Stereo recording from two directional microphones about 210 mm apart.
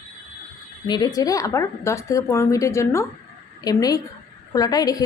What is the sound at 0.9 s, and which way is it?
A woman's voice, 20° left (ahead or behind).